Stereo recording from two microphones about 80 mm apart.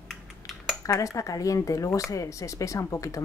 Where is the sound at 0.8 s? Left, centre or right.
Left.